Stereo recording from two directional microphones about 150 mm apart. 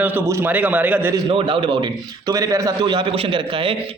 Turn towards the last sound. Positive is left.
turn(degrees=-35)  # may be behind; listen again after turning